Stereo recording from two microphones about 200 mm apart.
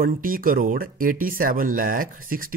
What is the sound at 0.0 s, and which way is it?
Speech, 45° right (ahead or behind).